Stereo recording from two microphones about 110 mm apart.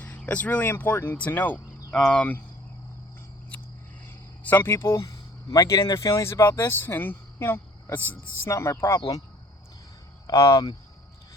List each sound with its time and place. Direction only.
0.0 s speech: 15° left (ahead or behind)
4.4 s speech: 20° left (ahead or behind)
9.0 s speech: 35° left (ahead or behind)
10.2 s speech: 25° left (ahead or behind)